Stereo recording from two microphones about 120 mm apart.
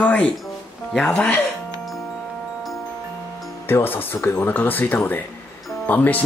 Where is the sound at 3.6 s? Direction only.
15° left (ahead or behind).